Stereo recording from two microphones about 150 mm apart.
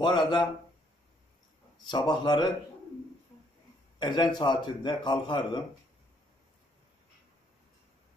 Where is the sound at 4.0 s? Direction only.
30° left (ahead or behind).